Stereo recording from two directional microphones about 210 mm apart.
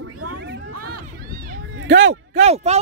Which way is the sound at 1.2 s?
45° right (ahead or behind).